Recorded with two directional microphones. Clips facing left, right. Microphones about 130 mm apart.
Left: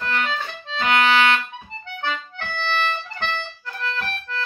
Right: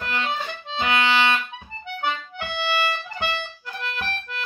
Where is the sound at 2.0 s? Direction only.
10° right (ahead or behind).